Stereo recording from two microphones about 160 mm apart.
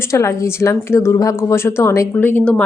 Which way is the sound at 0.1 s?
20° left (ahead or behind).